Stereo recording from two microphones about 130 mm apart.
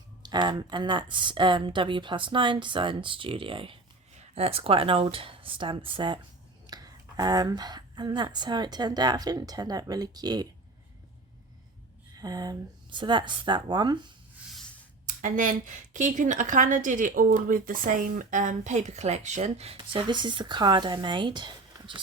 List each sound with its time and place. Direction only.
0.2 s speech: 35° right (ahead or behind)
6.7 s speech: 30° right (ahead or behind)
12.1 s speech: 30° right (ahead or behind)
15.0 s speech: 85° right; by 22.0 s 40° right (ahead or behind)